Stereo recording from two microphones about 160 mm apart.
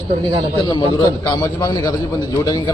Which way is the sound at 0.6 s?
30° left (ahead or behind).